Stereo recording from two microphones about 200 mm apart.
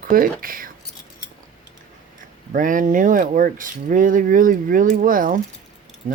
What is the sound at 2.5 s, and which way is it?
Speech, 40° right (ahead or behind).